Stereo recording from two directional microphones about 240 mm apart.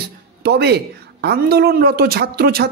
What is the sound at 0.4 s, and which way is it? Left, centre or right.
Speech, right.